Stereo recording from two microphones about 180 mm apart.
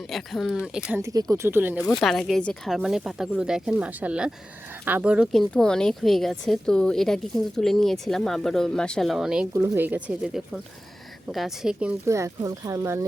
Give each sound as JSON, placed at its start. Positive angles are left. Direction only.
{"t": 0.1, "sound": "speech", "side_deg": 0}
{"t": 0.9, "sound": "speech", "side_deg": -15}
{"t": 2.0, "sound": "speech", "side_deg": 0}
{"t": 9.5, "sound": "speech", "side_deg": -15}
{"t": 12.0, "sound": "speech", "side_deg": -15}